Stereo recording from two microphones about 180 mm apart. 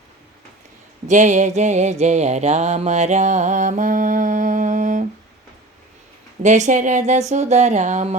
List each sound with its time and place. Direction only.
1.0 s mantra: 45° right (ahead or behind)
6.4 s mantra: 45° right (ahead or behind)